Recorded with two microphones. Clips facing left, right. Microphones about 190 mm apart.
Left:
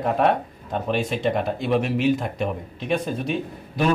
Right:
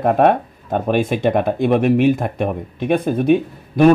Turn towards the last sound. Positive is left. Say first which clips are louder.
# right 10 dB
turn(degrees=-55)  # may be behind; listen again after turning